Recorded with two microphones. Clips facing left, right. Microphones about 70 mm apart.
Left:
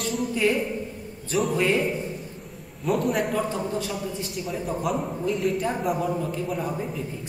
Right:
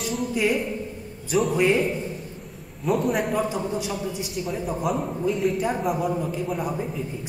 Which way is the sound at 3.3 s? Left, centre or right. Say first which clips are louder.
Right 1 dB; centre.